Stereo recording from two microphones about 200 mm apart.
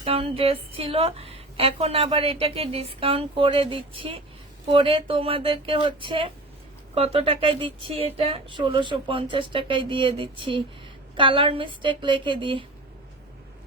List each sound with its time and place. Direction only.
0.0 s a woman's voice: 30° right (ahead or behind)